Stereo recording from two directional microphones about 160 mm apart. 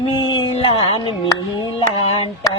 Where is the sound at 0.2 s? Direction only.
30° left (ahead or behind).